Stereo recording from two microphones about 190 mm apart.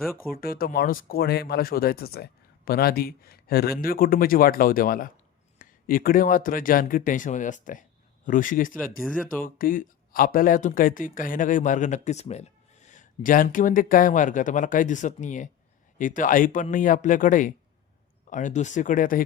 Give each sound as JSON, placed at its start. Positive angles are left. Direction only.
{"t": 0.3, "sound": "speech", "side_deg": 55}
{"t": 9.0, "sound": "speech", "side_deg": 0}
{"t": 9.4, "sound": "speech", "side_deg": 45}